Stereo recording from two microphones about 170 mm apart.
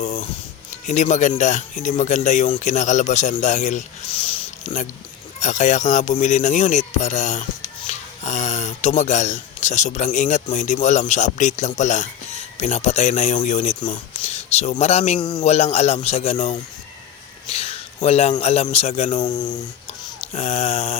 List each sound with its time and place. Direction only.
0.0 s snoring: 40° left (ahead or behind)
0.9 s a man's voice: 45° left (ahead or behind)
15.2 s speech: 25° left (ahead or behind)
15.4 s snoring: 35° left (ahead or behind)
17.5 s a man's voice: 35° left (ahead or behind)
19.2 s speech: 25° left (ahead or behind)
20.2 s snoring: 35° left (ahead or behind)